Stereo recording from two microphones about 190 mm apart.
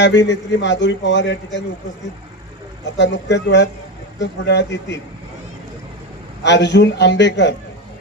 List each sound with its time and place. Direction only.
0.0 s a man's voice: 65° left (ahead or behind)
3.0 s speech: 65° left (ahead or behind)
6.4 s a man's voice: 65° left (ahead or behind)